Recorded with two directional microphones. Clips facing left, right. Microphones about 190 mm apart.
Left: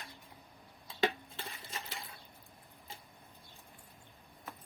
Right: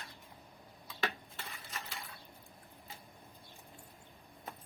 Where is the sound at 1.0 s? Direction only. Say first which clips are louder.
Left 6 dB; 25° left (ahead or behind).